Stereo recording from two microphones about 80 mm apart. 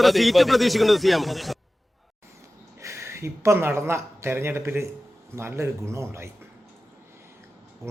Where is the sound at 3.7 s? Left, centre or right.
Right.